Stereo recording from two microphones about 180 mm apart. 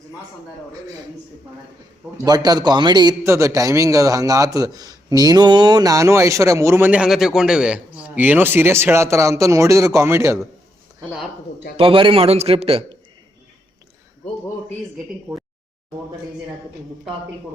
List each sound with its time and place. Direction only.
2.2 s a man's voice: 20° right (ahead or behind)
11.8 s a man's voice: 30° right (ahead or behind)